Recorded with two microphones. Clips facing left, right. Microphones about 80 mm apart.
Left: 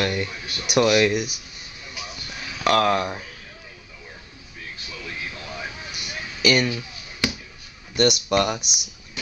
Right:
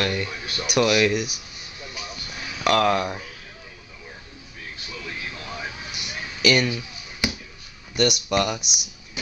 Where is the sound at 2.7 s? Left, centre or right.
Centre.